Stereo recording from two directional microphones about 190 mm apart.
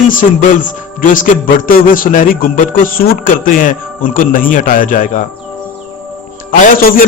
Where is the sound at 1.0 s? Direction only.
45° left (ahead or behind).